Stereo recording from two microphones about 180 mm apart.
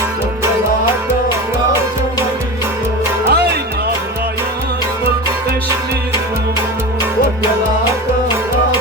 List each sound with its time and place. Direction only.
3.2 s music: 65° right (ahead or behind)